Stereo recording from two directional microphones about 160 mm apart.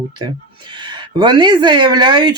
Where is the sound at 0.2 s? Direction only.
30° right (ahead or behind).